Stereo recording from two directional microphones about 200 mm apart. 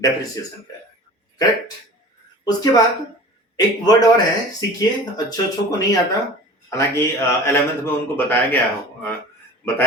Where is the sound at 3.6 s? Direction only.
20° left (ahead or behind).